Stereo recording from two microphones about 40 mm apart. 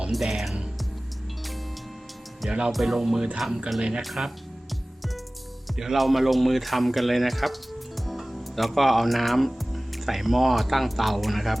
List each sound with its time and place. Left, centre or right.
0.1 s speech: centre
2.5 s speech: right
2.7 s music: centre
3.8 s speech: centre
4.0 s speech: centre
5.7 s speech: centre